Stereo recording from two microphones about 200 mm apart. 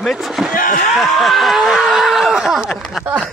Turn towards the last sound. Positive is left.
turn(degrees=-5)  # may be behind; listen again after turning